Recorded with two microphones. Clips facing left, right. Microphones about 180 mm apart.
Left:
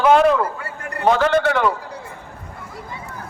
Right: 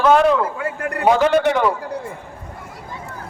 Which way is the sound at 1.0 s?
15° right (ahead or behind).